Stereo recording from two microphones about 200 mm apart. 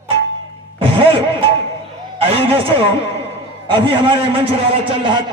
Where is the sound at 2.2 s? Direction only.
30° right (ahead or behind).